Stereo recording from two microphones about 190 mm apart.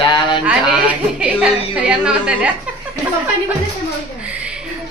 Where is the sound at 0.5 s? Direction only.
5° right (ahead or behind).